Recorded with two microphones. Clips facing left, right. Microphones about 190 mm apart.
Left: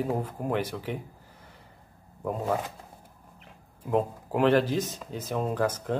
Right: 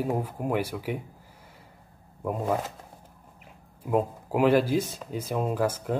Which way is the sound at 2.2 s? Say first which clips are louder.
Right 1 dB; 5° right (ahead or behind).